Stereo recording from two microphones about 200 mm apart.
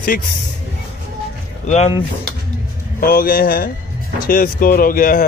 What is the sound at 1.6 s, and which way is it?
Speech, 30° left (ahead or behind).